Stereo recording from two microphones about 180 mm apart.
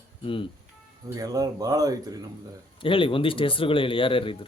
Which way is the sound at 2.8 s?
30° left (ahead or behind).